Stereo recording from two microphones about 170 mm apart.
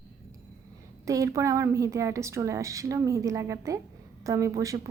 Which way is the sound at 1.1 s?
20° right (ahead or behind).